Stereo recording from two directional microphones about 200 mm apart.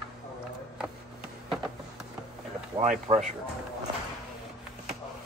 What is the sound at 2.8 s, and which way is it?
Speech, 35° right (ahead or behind).